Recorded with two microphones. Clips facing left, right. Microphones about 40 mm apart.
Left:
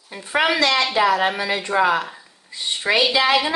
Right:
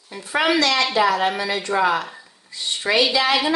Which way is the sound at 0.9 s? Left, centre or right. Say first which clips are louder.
Left 1 dB; centre.